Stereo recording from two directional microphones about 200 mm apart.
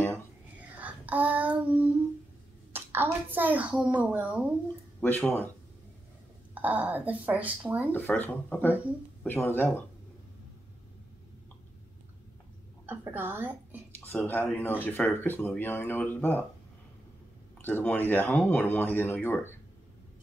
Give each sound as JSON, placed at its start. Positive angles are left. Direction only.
{"t": 0.7, "sound": "child singing", "side_deg": -10}
{"t": 2.7, "sound": "a woman's voice", "side_deg": -10}
{"t": 5.0, "sound": "speech", "side_deg": 10}
{"t": 6.5, "sound": "a woman's voice", "side_deg": -10}
{"t": 7.9, "sound": "speech", "side_deg": 10}
{"t": 12.8, "sound": "a woman's voice", "side_deg": -10}
{"t": 13.9, "sound": "speech", "side_deg": 10}
{"t": 17.6, "sound": "speech", "side_deg": 10}